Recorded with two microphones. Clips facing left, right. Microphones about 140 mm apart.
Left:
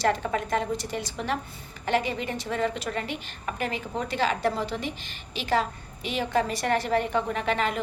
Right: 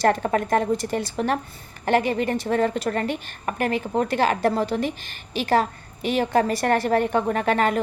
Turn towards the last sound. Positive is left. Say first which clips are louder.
# right 6 dB
turn(degrees=-50)  # may be behind; listen again after turning